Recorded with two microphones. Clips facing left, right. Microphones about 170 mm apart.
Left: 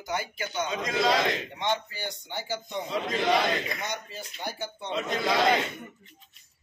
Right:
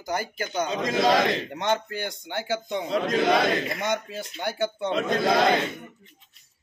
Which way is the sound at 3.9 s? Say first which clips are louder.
Right 8 dB; 90° right.